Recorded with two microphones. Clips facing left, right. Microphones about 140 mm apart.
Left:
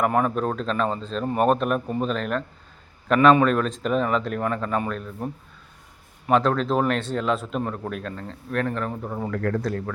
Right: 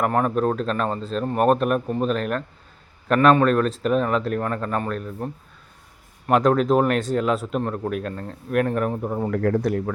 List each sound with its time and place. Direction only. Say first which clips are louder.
0.0 s speech: right 1 dB; centre (ahead or behind)
6.4 s speech: right 4 dB; 10° right (ahead or behind)
9.6 s speech: right 4 dB; 15° right (ahead or behind)